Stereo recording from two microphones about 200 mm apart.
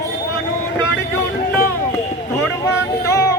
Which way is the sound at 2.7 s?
15° left (ahead or behind).